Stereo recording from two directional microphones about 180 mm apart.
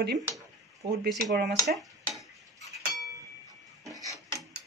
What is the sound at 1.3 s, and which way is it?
Speech, 60° right (ahead or behind).